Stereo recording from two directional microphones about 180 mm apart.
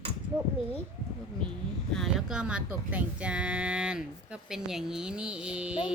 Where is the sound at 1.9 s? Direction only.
Centre (ahead or behind).